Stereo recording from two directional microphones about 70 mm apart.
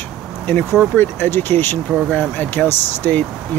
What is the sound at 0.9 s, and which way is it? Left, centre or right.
Speech, left.